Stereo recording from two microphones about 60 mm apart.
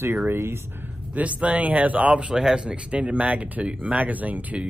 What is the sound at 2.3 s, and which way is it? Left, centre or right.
Speech, centre.